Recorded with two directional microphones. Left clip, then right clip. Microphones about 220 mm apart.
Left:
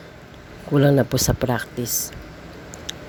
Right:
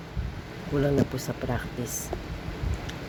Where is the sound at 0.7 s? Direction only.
45° left (ahead or behind).